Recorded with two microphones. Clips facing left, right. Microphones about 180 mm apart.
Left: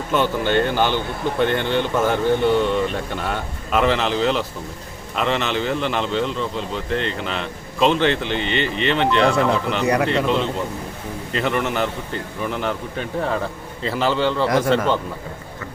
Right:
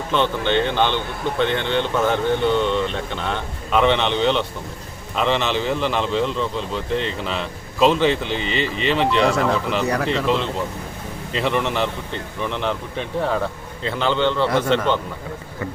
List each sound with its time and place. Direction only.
0.1 s a man's voice: 10° left (ahead or behind)
9.8 s speech: 10° left (ahead or behind)
10.1 s a man's voice: centre (ahead or behind)